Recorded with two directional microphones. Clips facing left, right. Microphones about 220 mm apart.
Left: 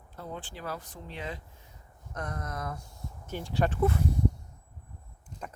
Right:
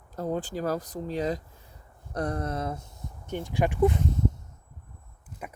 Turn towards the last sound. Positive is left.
turn(degrees=-10)  # may be behind; listen again after turning